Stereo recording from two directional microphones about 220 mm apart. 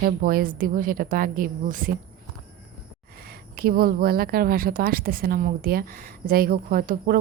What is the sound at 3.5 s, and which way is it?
A woman's voice, 45° right (ahead or behind).